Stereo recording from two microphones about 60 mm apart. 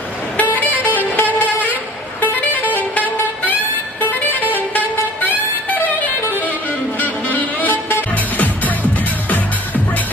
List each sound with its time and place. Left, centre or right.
0.3 s music: left
2.2 s vehicle: left
2.9 s music: left
6.3 s music: left